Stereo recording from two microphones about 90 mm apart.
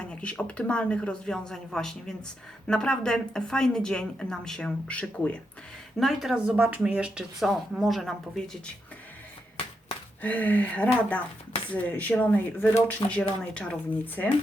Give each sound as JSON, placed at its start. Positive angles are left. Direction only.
{"t": 0.0, "sound": "a woman's voice", "side_deg": 10}
{"t": 6.0, "sound": "speech", "side_deg": 0}
{"t": 10.2, "sound": "a woman's voice", "side_deg": 15}